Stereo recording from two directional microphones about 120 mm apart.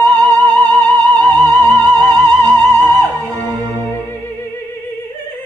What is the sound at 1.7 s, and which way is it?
Music, 35° right (ahead or behind).